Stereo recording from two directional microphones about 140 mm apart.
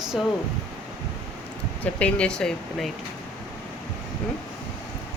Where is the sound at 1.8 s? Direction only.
10° left (ahead or behind).